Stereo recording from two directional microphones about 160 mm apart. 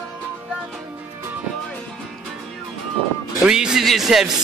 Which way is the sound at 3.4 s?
5° right (ahead or behind).